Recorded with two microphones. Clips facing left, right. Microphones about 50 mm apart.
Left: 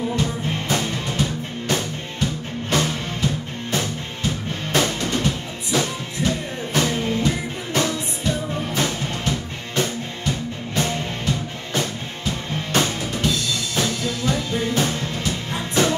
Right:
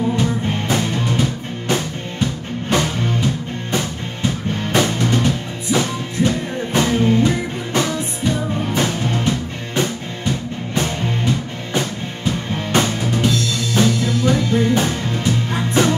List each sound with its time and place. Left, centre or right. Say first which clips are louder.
0.2 s music: right 4 dB; centre
2.7 s music: right 4 dB; centre
4.7 s music: right 3 dB; centre